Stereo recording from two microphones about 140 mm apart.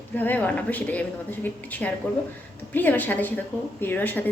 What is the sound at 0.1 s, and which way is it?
A woman's voice, 10° left (ahead or behind).